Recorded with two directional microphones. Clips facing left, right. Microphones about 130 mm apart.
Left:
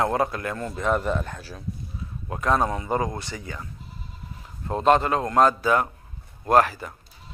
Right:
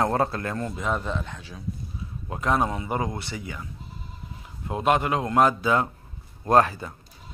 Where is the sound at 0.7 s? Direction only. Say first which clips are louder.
Left 4 dB; centre (ahead or behind).